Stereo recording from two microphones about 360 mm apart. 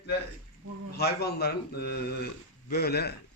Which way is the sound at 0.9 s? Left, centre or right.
Left.